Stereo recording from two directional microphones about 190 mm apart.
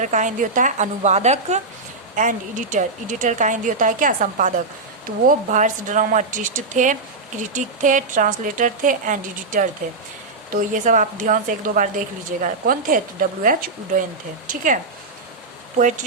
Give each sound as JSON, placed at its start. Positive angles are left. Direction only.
{"t": 0.0, "sound": "a woman's voice", "side_deg": -40}